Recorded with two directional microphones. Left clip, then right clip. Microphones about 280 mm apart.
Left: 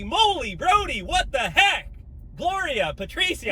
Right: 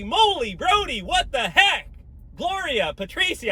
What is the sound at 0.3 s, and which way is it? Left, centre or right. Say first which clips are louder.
Speech: even; centre.